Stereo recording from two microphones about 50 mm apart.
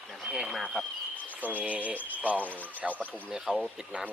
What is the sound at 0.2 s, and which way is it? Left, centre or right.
Speech, centre.